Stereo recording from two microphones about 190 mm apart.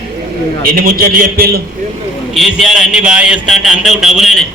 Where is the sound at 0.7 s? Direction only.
50° right (ahead or behind).